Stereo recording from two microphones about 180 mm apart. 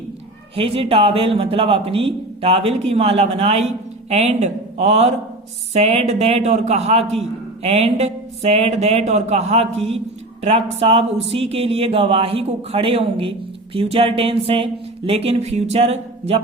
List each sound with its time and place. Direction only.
0.5 s a man's voice: 30° right (ahead or behind)